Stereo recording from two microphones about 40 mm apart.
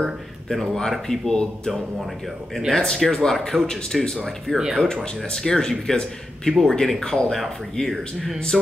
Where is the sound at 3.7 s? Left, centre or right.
Centre.